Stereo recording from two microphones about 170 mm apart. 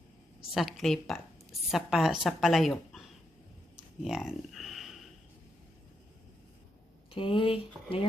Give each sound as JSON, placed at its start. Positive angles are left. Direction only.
{"t": 0.5, "sound": "a woman's voice", "side_deg": 0}
{"t": 7.1, "sound": "speech", "side_deg": 30}